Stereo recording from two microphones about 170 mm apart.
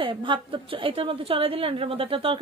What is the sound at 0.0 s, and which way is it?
A woman's voice, 30° right (ahead or behind).